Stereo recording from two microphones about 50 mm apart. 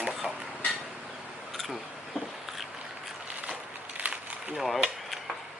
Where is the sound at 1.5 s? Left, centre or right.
Centre.